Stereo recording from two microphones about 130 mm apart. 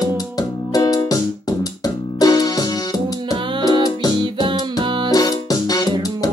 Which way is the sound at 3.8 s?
30° left (ahead or behind).